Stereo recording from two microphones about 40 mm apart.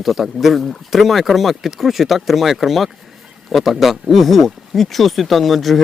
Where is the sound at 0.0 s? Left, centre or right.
Centre.